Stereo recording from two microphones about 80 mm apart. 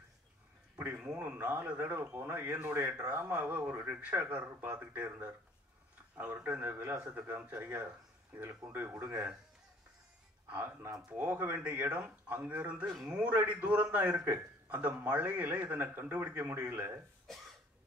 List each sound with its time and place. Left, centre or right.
0.9 s a man's voice: centre
10.5 s a man's voice: right